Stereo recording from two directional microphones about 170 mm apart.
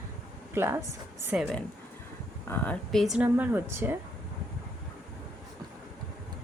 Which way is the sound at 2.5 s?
5° left (ahead or behind).